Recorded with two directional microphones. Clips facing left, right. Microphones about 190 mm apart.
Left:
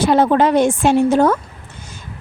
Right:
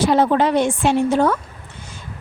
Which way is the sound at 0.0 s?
50° left (ahead or behind).